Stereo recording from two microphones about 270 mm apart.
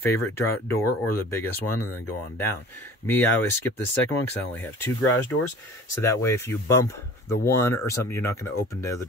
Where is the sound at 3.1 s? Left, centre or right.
Centre.